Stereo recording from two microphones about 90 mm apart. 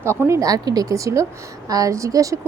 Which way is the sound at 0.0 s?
30° right (ahead or behind).